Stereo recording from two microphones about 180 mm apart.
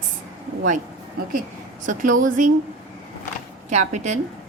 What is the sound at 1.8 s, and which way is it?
Speech, 45° right (ahead or behind).